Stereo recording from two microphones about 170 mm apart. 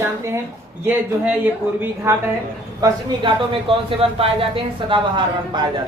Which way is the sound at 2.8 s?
25° right (ahead or behind).